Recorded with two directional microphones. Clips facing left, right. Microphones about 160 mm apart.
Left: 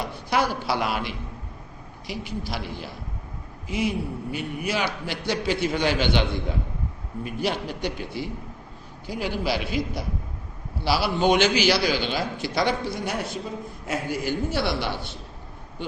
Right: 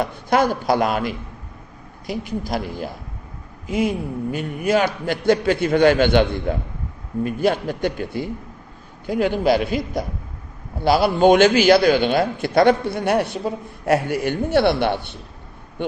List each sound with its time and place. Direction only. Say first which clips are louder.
0.0 s a man's voice: right 6 dB; 50° right (ahead or behind)